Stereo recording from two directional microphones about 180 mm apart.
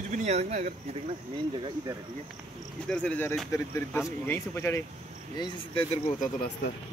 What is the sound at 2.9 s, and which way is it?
Speech, 5° left (ahead or behind).